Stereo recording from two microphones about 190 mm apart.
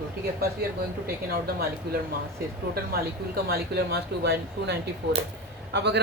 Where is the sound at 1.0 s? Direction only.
55° right (ahead or behind).